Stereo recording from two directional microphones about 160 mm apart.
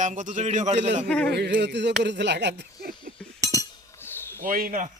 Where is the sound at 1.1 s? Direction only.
5° left (ahead or behind).